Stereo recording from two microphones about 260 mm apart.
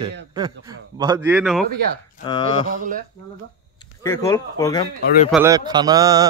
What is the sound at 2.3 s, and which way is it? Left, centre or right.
Speech, centre.